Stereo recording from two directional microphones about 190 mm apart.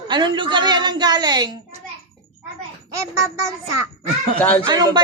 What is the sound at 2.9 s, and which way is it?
Speech, 15° right (ahead or behind).